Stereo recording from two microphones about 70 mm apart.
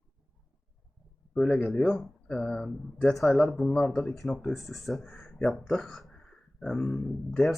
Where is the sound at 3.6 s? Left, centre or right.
Centre.